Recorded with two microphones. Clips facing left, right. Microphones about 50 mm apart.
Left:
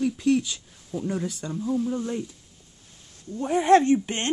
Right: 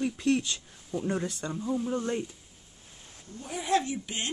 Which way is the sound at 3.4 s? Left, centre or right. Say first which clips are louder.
Left 10 dB; left.